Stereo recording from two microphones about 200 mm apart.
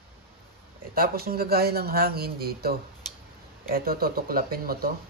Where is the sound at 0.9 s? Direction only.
45° right (ahead or behind).